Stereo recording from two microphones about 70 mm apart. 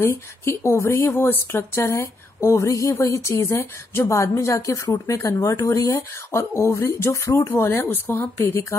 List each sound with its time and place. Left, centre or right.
0.0 s speech: left